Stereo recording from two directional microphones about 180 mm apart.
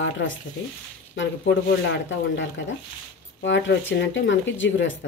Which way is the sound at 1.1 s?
85° left.